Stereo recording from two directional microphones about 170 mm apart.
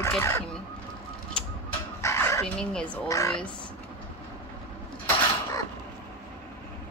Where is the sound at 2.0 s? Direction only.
15° left (ahead or behind).